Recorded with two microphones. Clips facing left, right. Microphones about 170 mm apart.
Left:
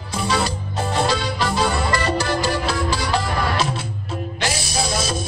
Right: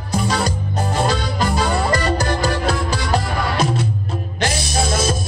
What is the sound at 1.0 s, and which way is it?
Music, 45° right (ahead or behind).